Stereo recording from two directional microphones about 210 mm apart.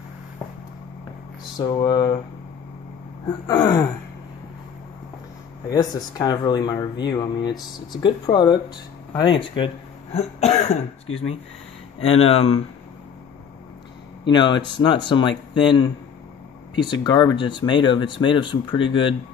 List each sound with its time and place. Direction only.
1.6 s speech: 20° left (ahead or behind)
3.4 s speech: 20° left (ahead or behind)
5.7 s speech: 20° left (ahead or behind)
10.1 s cough: 30° left (ahead or behind)
12.0 s speech: 25° left (ahead or behind)
14.2 s speech: 20° left (ahead or behind)